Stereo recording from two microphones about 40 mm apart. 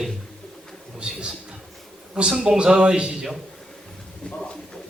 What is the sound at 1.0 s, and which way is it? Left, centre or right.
A man's voice, right.